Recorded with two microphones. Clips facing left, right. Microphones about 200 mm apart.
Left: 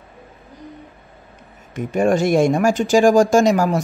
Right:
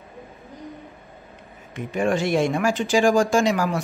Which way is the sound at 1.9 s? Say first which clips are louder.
Left 5 dB; 45° left (ahead or behind).